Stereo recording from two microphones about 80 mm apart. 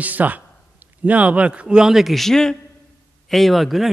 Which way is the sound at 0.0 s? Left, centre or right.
Centre.